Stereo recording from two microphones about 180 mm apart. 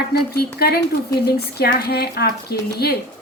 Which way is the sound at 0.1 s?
60° left (ahead or behind).